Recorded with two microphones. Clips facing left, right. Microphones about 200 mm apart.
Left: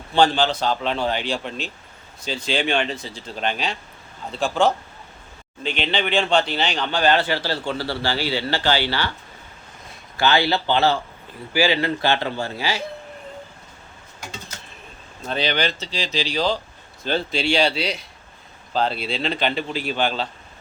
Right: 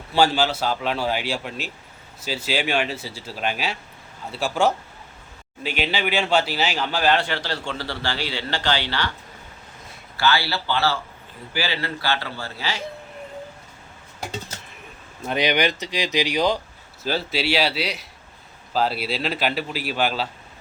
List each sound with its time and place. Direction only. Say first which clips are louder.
0.1 s speech: left 1 dB; 5° right (ahead or behind)
10.2 s a man's voice: left 3 dB; 20° left (ahead or behind)
15.3 s speech: right 2 dB; 15° right (ahead or behind)